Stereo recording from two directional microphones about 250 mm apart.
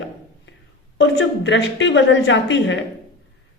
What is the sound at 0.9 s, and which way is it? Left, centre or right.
A man's voice, left.